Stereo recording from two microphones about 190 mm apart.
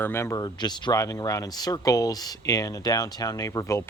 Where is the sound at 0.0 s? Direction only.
15° left (ahead or behind).